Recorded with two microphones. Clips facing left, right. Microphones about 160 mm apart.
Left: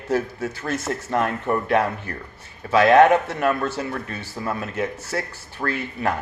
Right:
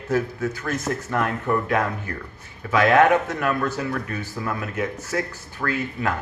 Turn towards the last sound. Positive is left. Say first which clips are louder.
# even
turn(degrees=35)  # may be behind; listen again after turning